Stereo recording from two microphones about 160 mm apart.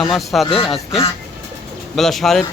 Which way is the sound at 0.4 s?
35° left (ahead or behind).